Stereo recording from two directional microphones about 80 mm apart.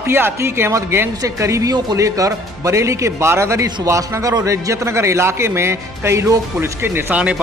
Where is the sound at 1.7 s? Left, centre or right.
Right.